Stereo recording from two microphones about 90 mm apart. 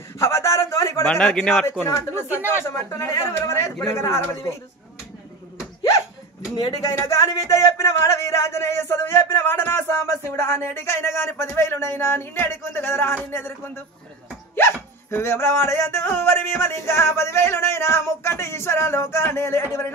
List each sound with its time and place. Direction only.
0.2 s a sound: 30° left (ahead or behind)
1.0 s a man's voice: 10° left (ahead or behind)
1.9 s speech: 35° left (ahead or behind)
7.0 s speech: 30° left (ahead or behind)